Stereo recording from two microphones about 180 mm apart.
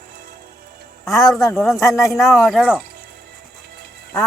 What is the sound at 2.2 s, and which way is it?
Speech, centre (ahead or behind).